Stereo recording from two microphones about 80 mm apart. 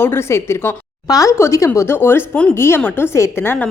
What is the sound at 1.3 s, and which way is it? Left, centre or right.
A woman's voice, left.